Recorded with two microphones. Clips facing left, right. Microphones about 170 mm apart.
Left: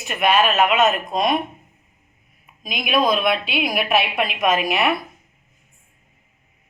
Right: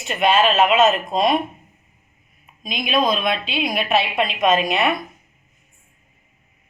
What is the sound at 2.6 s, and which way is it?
A woman's voice, 5° left (ahead or behind).